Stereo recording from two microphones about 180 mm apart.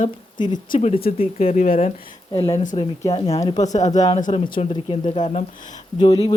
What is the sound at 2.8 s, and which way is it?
Speech, 30° left (ahead or behind).